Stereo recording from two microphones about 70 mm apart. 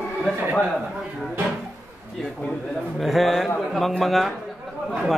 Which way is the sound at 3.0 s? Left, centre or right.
Centre.